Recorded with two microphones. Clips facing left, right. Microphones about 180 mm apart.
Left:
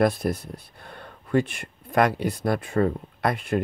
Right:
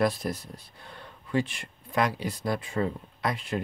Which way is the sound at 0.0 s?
60° left (ahead or behind).